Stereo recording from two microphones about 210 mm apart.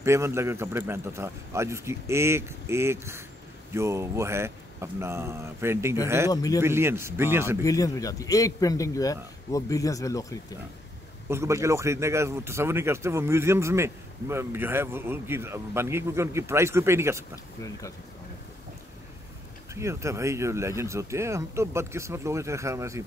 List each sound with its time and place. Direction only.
0.0 s speech: 10° right (ahead or behind)
6.3 s a man's voice: 15° left (ahead or behind)
6.6 s speech: 10° right (ahead or behind)
7.6 s a man's voice: 15° left (ahead or behind)
11.2 s speech: 15° right (ahead or behind)
19.7 s speech: 15° right (ahead or behind)